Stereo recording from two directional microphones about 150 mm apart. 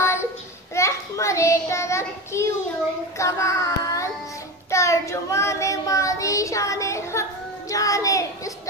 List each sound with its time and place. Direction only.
0.0 s child singing: 15° left (ahead or behind)